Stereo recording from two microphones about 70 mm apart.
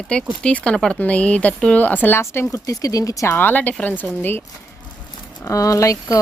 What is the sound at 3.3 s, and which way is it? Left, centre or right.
Speech, left.